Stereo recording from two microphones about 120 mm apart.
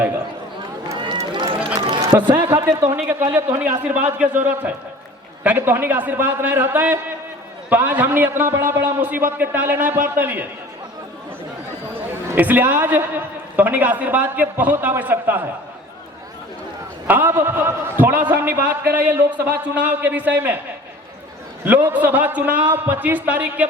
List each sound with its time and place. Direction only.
0.9 s run: 40° right (ahead or behind)
2.3 s a sound: 25° right (ahead or behind)
3.3 s a man's voice: 20° right (ahead or behind)
12.3 s a man's voice: 15° right (ahead or behind)
17.1 s a man's voice: 15° right (ahead or behind)
21.6 s a man's voice: 15° right (ahead or behind)